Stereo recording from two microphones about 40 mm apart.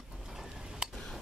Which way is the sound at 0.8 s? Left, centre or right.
Centre.